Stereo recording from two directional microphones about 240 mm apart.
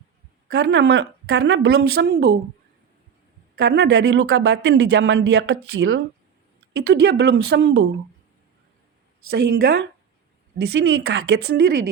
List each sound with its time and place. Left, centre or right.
0.5 s speech: right
3.6 s speech: right
6.8 s speech: right
9.3 s speech: right